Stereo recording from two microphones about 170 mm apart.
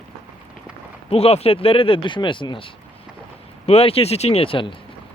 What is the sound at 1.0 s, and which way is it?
Speech, 35° left (ahead or behind).